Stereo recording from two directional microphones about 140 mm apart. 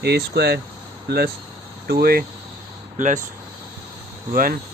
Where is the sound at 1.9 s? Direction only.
90° right.